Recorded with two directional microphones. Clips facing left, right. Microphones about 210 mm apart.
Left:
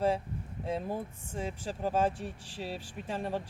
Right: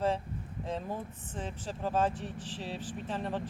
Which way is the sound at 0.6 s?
10° left (ahead or behind).